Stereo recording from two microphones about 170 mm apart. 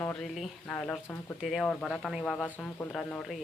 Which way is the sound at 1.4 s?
Centre (ahead or behind).